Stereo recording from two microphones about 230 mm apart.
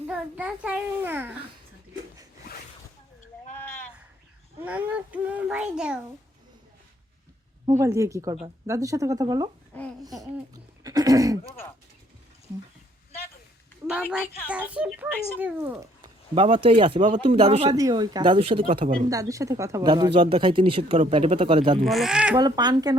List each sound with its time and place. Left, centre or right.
0.1 s speech: centre
3.6 s a sound: centre
4.6 s a child's voice: centre
7.7 s speech: centre
14.5 s a child's voice: centre; by 18.6 s right
18.9 s speech: right
19.1 s speech: centre
21.8 s a child's voice: centre
22.4 s speech: centre